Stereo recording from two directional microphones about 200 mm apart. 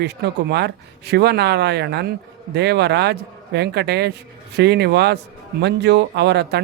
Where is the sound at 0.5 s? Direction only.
55° right (ahead or behind).